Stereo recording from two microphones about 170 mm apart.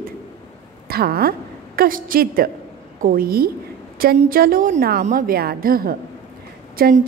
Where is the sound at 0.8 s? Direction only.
65° right (ahead or behind).